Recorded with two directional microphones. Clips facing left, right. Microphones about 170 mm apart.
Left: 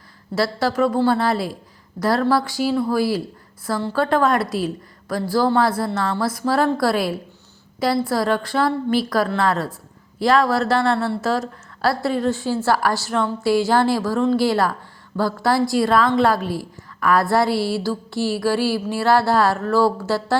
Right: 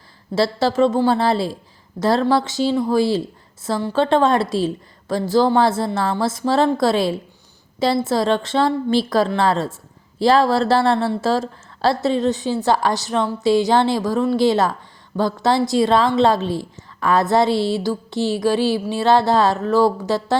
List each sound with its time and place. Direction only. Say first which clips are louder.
0.3 s a woman's voice: right 3 dB; 25° right (ahead or behind)